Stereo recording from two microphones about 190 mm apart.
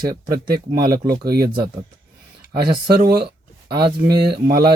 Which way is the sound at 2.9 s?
55° right (ahead or behind).